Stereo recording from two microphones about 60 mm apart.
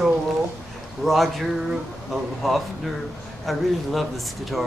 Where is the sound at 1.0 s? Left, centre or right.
Centre.